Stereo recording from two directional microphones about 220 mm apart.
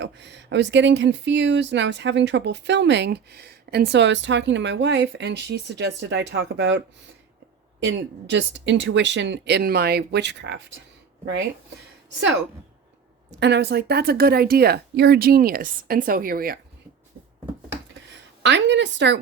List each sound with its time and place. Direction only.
0.0 s speech: 55° right (ahead or behind)
13.4 s speech: 50° right (ahead or behind)
18.4 s speech: 55° right (ahead or behind)